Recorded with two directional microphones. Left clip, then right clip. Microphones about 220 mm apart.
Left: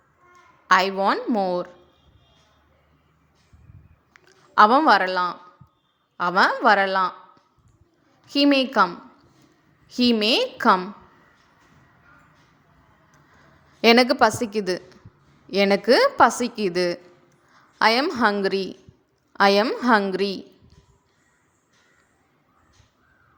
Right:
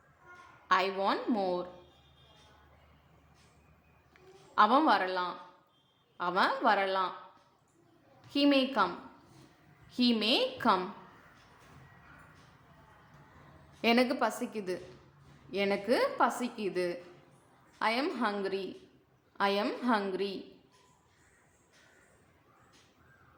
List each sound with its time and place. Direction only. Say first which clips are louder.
0.7 s a woman's voice: left 10 dB; 40° left (ahead or behind)
4.1 s a woman's voice: left 11 dB; 35° left (ahead or behind)
8.3 s a woman's voice: left 9 dB; 40° left (ahead or behind)
13.8 s a woman's voice: left 12 dB; 40° left (ahead or behind)